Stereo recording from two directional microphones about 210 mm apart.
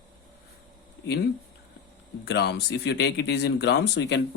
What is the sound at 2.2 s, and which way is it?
Speech, 50° left (ahead or behind).